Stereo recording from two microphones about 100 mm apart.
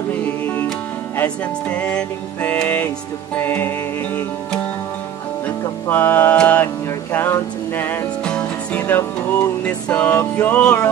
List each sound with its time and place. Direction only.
1.1 s music: 15° left (ahead or behind)
5.9 s music: 20° left (ahead or behind)
8.2 s music: 10° left (ahead or behind)